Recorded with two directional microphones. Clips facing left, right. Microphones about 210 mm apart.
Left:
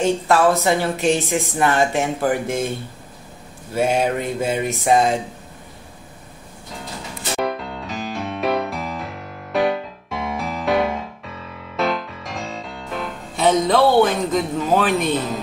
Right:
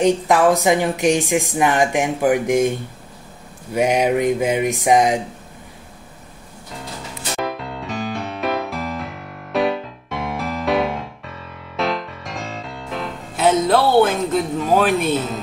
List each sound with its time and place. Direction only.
0.0 s speech: 15° right (ahead or behind)
7.3 s music: centre (ahead or behind)